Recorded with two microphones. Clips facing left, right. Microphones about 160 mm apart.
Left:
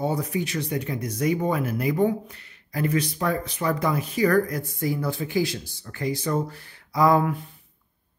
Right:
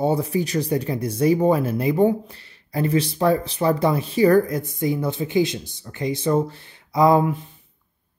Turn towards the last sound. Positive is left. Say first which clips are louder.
# right 3 dB
turn(degrees=-20)  # may be behind; listen again after turning